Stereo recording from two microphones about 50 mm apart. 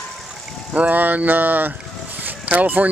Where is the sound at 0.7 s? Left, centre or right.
Right.